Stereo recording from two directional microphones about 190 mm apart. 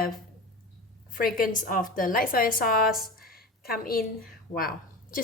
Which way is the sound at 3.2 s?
50° left (ahead or behind).